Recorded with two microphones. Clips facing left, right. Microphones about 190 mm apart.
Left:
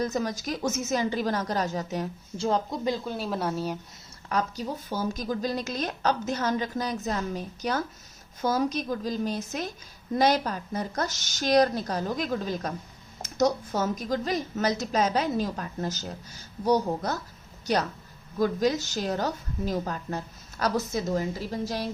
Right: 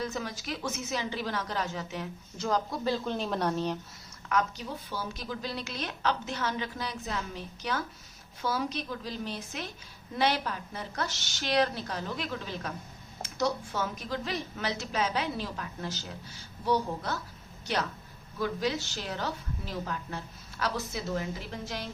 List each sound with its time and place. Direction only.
0.0 s a woman's voice: 40° left (ahead or behind)
2.4 s a woman's voice: 25° left (ahead or behind); by 3.8 s 5° left (ahead or behind)
4.3 s a woman's voice: 35° left (ahead or behind)